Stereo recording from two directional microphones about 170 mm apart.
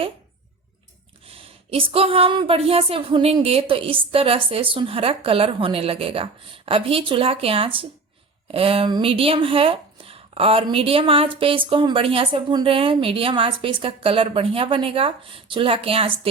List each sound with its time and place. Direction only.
1.2 s speech: 35° right (ahead or behind)